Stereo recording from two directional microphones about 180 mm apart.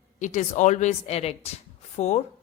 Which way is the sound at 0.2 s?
45° left (ahead or behind).